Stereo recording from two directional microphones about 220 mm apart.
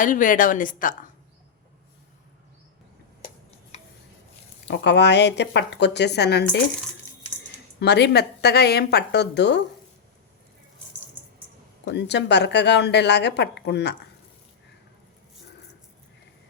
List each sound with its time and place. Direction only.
0.0 s speech: 35° left (ahead or behind)
3.7 s a sound: 30° left (ahead or behind)
4.7 s speech: 50° left (ahead or behind)
7.8 s speech: 50° left (ahead or behind)
11.9 s speech: 50° left (ahead or behind)